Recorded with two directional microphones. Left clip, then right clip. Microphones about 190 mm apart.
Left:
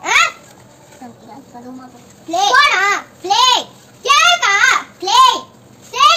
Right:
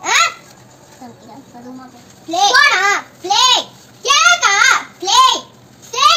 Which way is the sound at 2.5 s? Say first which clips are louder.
Even; 10° left (ahead or behind).